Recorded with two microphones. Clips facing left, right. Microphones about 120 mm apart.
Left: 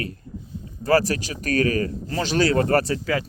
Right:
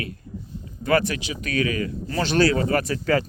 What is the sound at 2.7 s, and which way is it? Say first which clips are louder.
Speech: left 3 dB; 30° left (ahead or behind).